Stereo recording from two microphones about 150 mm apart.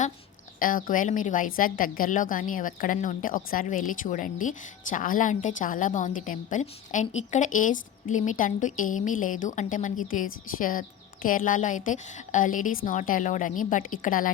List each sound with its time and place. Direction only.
0.6 s a woman's voice: 70° left (ahead or behind)